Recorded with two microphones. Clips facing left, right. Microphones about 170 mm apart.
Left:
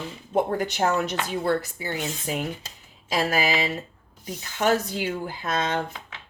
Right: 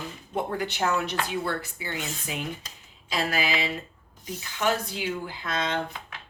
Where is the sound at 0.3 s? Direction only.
45° left (ahead or behind).